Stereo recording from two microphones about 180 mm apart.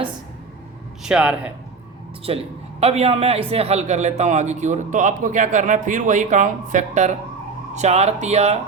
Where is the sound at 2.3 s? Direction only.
30° right (ahead or behind).